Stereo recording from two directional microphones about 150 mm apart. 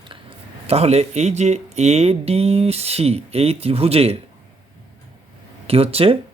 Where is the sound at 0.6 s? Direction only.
45° right (ahead or behind).